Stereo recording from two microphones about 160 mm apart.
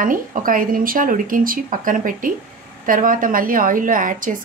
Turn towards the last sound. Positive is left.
turn(degrees=-55)  # may be behind; listen again after turning